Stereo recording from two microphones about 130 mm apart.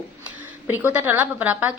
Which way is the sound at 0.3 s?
15° right (ahead or behind).